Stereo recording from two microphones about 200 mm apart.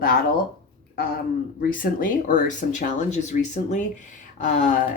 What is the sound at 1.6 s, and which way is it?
Speech, 40° left (ahead or behind).